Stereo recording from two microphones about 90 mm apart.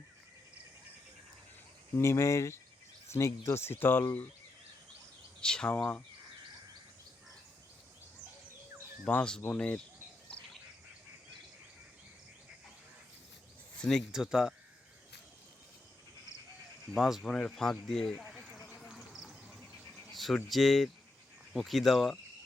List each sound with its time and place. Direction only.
2.0 s speech: 30° left (ahead or behind)
5.4 s speech: 10° left (ahead or behind)
9.0 s speech: 10° left (ahead or behind)
10.3 s insect: 10° left (ahead or behind)
13.7 s speech: 5° left (ahead or behind)
14.1 s speech: 5° right (ahead or behind)
16.9 s speech: centre (ahead or behind)
17.2 s speech: 10° left (ahead or behind)
18.4 s a sound: 5° left (ahead or behind)
20.1 s speech: centre (ahead or behind)